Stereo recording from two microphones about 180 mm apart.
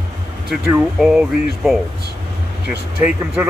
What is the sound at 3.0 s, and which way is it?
Speech, 10° right (ahead or behind).